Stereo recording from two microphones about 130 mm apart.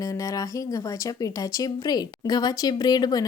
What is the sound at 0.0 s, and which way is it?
Speech, 25° left (ahead or behind).